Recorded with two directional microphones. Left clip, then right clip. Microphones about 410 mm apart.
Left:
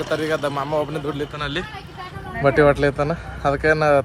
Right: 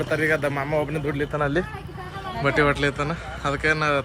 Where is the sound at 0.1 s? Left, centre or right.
Centre.